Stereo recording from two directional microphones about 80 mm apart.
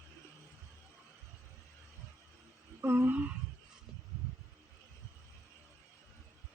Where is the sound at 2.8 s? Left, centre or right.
Right.